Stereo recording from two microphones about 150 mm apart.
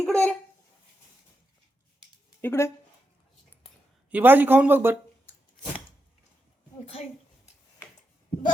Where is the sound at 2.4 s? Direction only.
15° left (ahead or behind).